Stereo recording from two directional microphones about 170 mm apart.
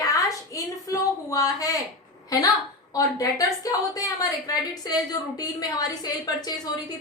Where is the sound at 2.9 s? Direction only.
20° left (ahead or behind).